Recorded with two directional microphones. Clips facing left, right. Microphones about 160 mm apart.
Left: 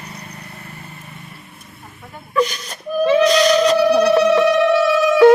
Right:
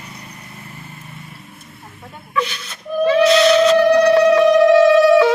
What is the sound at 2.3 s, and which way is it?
Whimper, 40° left (ahead or behind).